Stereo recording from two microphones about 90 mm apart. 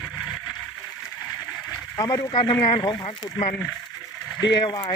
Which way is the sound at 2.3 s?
65° left (ahead or behind).